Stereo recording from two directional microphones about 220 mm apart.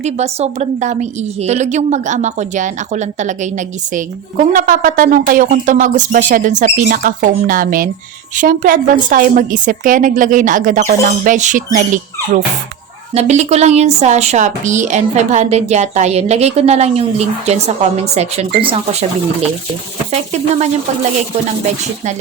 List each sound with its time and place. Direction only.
0.0 s a woman's voice: 30° right (ahead or behind)